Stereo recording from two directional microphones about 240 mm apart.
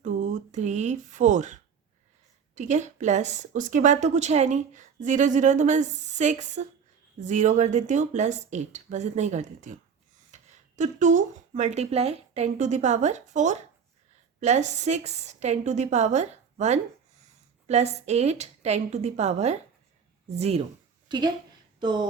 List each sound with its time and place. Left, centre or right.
0.0 s a woman's voice: right